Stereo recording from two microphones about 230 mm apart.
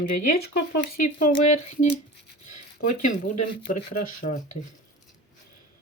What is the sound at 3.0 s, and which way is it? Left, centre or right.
Speech, left.